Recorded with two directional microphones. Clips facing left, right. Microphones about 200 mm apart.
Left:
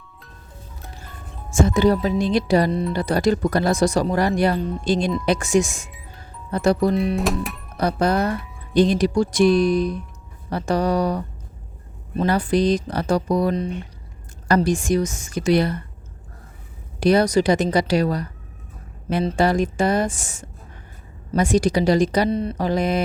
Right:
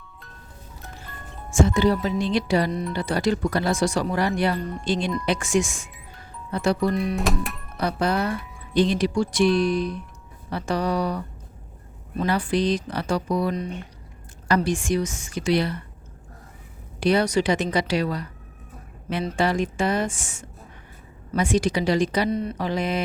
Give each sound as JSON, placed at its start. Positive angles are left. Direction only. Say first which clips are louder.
{"t": 1.6, "sound": "speech", "louder": "left 3 dB", "side_deg": 45}
{"t": 6.9, "sound": "music", "louder": "left 3 dB", "side_deg": 0}
{"t": 7.8, "sound": "speech", "louder": "left 4 dB", "side_deg": 40}
{"t": 12.2, "sound": "speech", "louder": "left 4 dB", "side_deg": 40}
{"t": 17.0, "sound": "speech", "louder": "left 4 dB", "side_deg": 40}
{"t": 19.4, "sound": "speech", "louder": "left 3 dB", "side_deg": 40}